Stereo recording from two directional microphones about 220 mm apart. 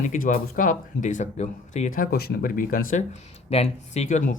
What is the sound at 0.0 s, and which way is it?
Speech, 35° left (ahead or behind).